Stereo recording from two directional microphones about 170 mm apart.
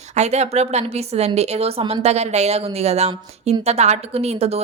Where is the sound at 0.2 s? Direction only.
40° right (ahead or behind).